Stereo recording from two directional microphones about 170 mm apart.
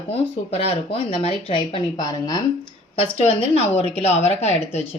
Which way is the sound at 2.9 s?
35° left (ahead or behind).